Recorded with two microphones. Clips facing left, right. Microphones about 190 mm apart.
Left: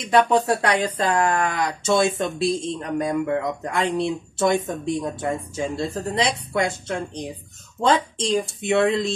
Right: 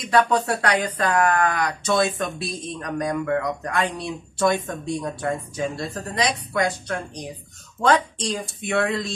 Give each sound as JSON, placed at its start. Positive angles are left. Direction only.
{"t": 0.1, "sound": "speech", "side_deg": 25}